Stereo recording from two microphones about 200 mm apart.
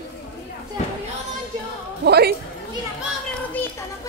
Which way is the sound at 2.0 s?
55° right (ahead or behind).